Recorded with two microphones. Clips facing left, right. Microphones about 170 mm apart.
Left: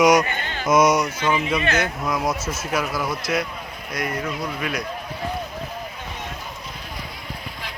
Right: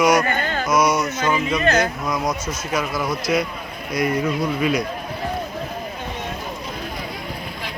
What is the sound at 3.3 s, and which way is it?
Speech, 5° right (ahead or behind).